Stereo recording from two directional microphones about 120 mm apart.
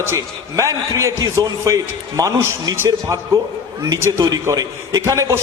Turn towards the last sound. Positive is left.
turn(degrees=-25)  # may be behind; listen again after turning